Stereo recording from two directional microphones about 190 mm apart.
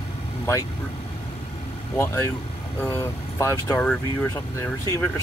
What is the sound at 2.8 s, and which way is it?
Speech, 15° left (ahead or behind).